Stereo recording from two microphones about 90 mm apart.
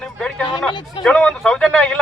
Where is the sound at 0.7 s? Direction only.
60° left (ahead or behind).